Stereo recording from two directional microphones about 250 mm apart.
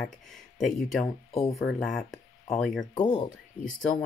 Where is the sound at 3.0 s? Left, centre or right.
Centre.